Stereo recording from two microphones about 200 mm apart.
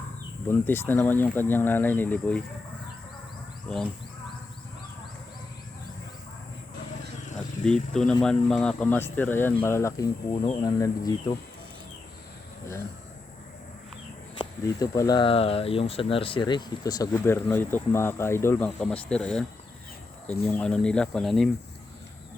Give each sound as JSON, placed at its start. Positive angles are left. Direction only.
{"t": 0.4, "sound": "speech", "side_deg": 10}
{"t": 3.7, "sound": "speech", "side_deg": 0}
{"t": 7.6, "sound": "speech", "side_deg": 5}
{"t": 14.3, "sound": "speech", "side_deg": 20}